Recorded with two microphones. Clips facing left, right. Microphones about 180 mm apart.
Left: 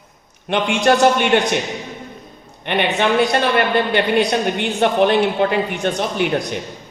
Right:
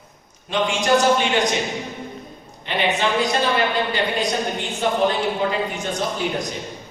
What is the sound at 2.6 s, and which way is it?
A man's voice, 60° left (ahead or behind).